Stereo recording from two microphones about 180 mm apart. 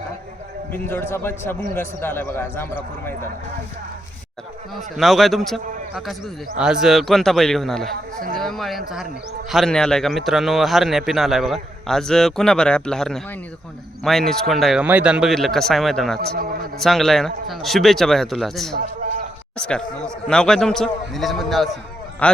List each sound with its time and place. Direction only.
0.7 s a man's voice: 10° left (ahead or behind)
4.9 s a man's voice: centre (ahead or behind)
16.3 s a man's voice: 55° right (ahead or behind)
16.8 s a man's voice: centre (ahead or behind)